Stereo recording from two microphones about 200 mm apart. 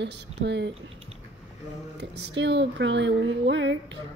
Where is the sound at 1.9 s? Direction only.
60° right (ahead or behind).